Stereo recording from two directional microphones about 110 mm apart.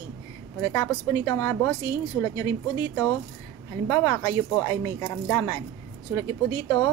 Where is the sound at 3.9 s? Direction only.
30° left (ahead or behind).